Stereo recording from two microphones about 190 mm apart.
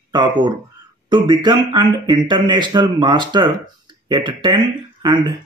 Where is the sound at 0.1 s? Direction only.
25° right (ahead or behind).